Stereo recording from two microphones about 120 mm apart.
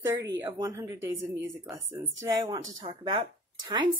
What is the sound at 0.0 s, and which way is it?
A woman's voice, 25° right (ahead or behind).